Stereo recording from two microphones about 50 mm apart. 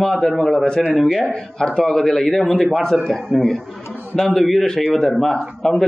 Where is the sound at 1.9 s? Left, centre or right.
Centre.